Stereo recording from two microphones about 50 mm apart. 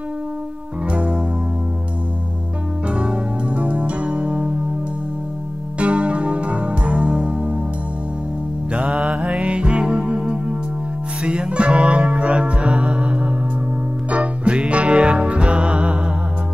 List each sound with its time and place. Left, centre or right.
0.8 s music: right
2.9 s music: right
5.8 s music: right
8.9 s music: centre